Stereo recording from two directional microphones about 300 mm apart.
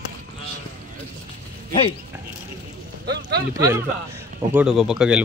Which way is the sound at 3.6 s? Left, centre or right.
Centre.